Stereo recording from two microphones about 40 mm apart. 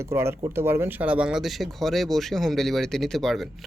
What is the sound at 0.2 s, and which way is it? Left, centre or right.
Speech, right.